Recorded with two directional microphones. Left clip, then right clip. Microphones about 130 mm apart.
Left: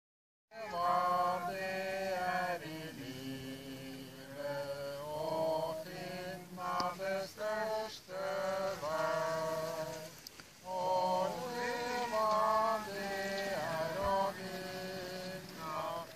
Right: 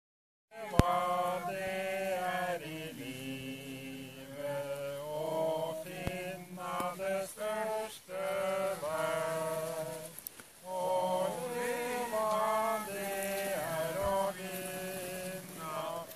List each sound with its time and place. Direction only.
0.6 s chant: 20° right (ahead or behind)
4.5 s mantra: 25° right (ahead or behind)
10.8 s chant: 25° right (ahead or behind)
13.4 s a sound: 25° right (ahead or behind)
15.6 s music: 20° right (ahead or behind)